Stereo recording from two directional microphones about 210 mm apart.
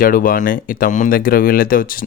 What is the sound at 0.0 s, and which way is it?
Speech, 40° left (ahead or behind).